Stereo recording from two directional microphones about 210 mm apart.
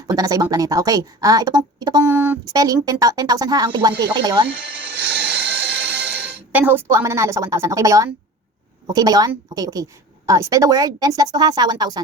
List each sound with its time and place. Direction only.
0.1 s speech: 15° right (ahead or behind)
4.4 s speech: 55° right (ahead or behind)
5.4 s music: 5° right (ahead or behind)
8.9 s speech: 20° right (ahead or behind)